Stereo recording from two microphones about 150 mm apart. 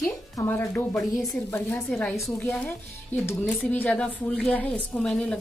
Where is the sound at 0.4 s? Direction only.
15° left (ahead or behind).